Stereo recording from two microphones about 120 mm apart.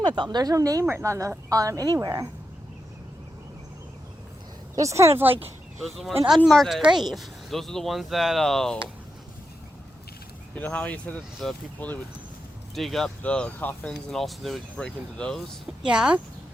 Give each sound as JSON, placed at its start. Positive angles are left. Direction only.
{"t": 0.0, "sound": "a woman's voice", "side_deg": -40}
{"t": 4.7, "sound": "a woman's voice", "side_deg": -25}
{"t": 5.8, "sound": "speech", "side_deg": 0}
{"t": 10.5, "sound": "speech", "side_deg": 10}
{"t": 12.7, "sound": "speech", "side_deg": 0}
{"t": 15.8, "sound": "speech", "side_deg": -5}